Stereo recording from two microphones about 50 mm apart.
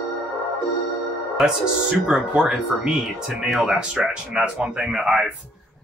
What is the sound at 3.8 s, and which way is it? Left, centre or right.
Speech, centre.